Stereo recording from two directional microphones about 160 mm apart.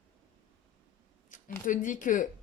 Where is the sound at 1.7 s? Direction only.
55° left (ahead or behind).